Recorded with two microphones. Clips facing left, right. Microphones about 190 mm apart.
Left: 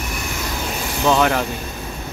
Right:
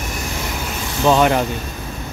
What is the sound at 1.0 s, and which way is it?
Speech, 15° right (ahead or behind).